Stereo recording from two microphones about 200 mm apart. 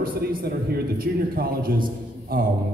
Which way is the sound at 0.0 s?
45° right (ahead or behind).